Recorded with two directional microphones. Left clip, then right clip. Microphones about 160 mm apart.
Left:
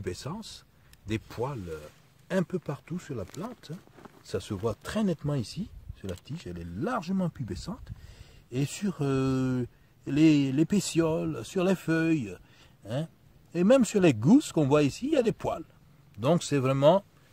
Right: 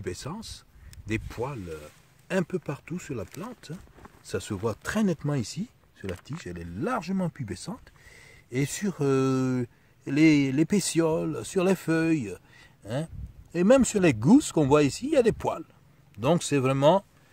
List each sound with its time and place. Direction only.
0.0 s speech: 15° right (ahead or behind)